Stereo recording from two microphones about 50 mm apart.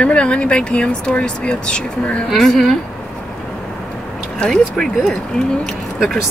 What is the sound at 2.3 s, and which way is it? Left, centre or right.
Speech, centre.